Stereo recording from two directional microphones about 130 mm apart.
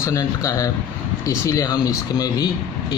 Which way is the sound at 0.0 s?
25° left (ahead or behind).